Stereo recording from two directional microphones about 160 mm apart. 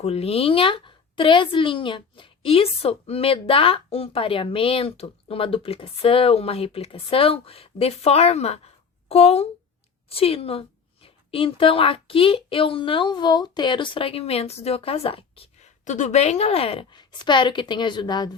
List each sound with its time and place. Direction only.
0.0 s a woman's voice: 40° left (ahead or behind)
15.8 s a woman's voice: 50° left (ahead or behind); by 18.3 s 25° left (ahead or behind)